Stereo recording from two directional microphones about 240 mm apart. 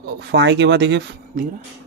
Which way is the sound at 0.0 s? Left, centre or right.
Right.